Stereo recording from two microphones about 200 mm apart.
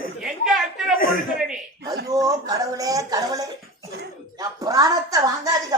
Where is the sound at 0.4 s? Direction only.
5° right (ahead or behind).